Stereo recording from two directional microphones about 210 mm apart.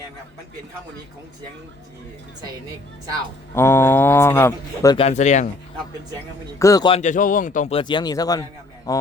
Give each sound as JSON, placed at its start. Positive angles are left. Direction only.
{"t": 3.5, "sound": "speech", "side_deg": 10}
{"t": 4.9, "sound": "speech", "side_deg": 30}
{"t": 6.6, "sound": "speech", "side_deg": 15}
{"t": 7.0, "sound": "a man's voice", "side_deg": 35}